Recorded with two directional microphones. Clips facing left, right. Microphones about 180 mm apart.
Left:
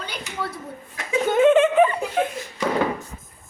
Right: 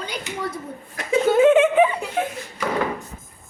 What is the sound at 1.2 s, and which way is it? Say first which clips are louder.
Speech: right 1 dB; 5° right (ahead or behind).